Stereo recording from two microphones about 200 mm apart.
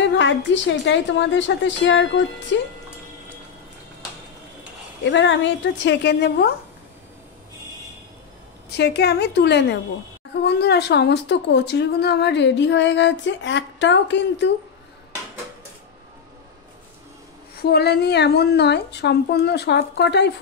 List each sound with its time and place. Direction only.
0.2 s a woman's voice: 65° left (ahead or behind)
5.1 s a woman's voice: 65° left (ahead or behind)
8.6 s a woman's voice: 55° left (ahead or behind)
17.6 s a woman's voice: 55° left (ahead or behind)